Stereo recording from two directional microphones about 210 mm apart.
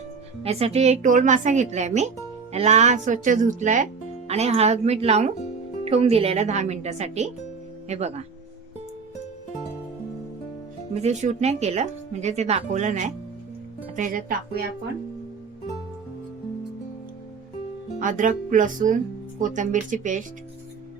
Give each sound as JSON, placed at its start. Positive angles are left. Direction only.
{"t": 0.4, "sound": "speech", "side_deg": -30}
{"t": 10.9, "sound": "speech", "side_deg": -30}
{"t": 18.0, "sound": "speech", "side_deg": -35}